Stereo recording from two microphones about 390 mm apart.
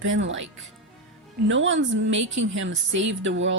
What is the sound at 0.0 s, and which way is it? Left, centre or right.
Speech, right.